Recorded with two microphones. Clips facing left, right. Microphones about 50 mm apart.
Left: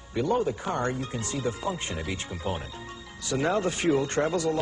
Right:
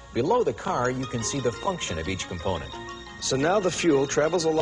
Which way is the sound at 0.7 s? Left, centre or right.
Centre.